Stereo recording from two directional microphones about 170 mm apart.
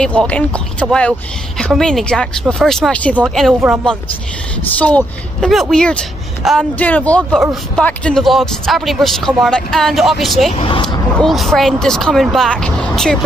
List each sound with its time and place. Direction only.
0.0 s speech: 5° left (ahead or behind)
4.7 s speech: 5° left (ahead or behind)
10.5 s speech: 30° left (ahead or behind)
11.1 s speech: centre (ahead or behind)